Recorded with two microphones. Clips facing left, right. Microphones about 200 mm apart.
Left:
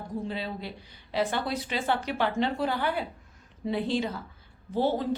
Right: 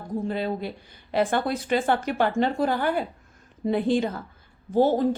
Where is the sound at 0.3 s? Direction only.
50° right (ahead or behind).